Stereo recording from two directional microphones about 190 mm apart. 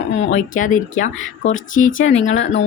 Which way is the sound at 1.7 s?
90° left.